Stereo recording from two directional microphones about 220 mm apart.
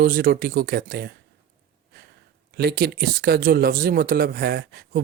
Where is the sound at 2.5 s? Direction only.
45° right (ahead or behind).